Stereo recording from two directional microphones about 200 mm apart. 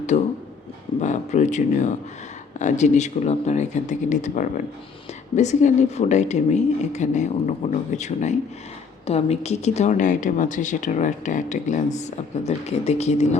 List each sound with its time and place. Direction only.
0.1 s a woman's voice: 35° left (ahead or behind)